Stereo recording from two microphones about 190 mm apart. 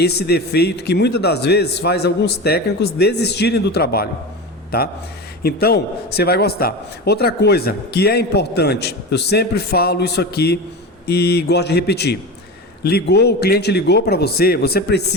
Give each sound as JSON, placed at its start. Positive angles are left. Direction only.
{"t": 0.0, "sound": "a man's voice", "side_deg": 60}